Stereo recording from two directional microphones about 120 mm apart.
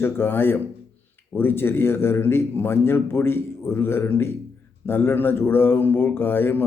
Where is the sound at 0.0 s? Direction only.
20° left (ahead or behind).